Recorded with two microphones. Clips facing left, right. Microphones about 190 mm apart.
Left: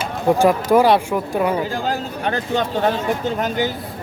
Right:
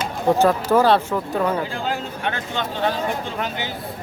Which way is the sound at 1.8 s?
40° left (ahead or behind).